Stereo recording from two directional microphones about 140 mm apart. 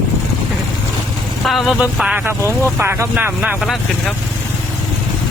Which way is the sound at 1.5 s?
Centre (ahead or behind).